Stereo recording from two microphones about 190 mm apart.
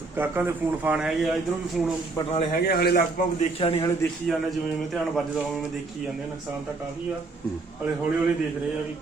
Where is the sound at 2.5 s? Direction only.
55° left (ahead or behind).